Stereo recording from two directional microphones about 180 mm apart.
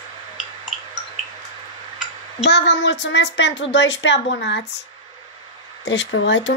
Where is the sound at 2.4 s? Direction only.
70° left (ahead or behind).